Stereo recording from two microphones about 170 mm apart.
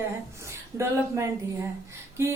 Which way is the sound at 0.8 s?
15° right (ahead or behind).